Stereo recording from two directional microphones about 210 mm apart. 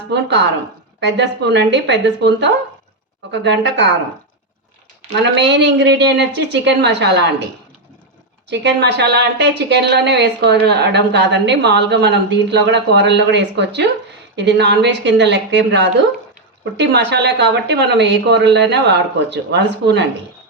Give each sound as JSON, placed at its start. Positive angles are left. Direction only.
{"t": 0.1, "sound": "speech", "side_deg": -55}
{"t": 5.1, "sound": "speech", "side_deg": -55}
{"t": 8.4, "sound": "speech", "side_deg": -55}